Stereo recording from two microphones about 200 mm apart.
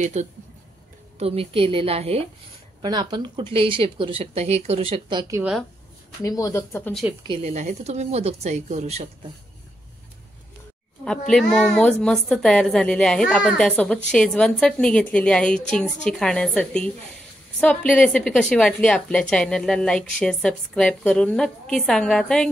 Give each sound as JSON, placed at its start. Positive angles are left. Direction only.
{"t": 0.0, "sound": "speech", "side_deg": -35}
{"t": 5.3, "sound": "a woman's voice", "side_deg": -5}
{"t": 6.2, "sound": "speech", "side_deg": 15}
{"t": 7.2, "sound": "speech", "side_deg": -35}
{"t": 11.1, "sound": "a woman's voice", "side_deg": 5}